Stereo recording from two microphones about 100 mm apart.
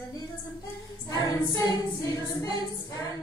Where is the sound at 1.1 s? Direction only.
40° left (ahead or behind).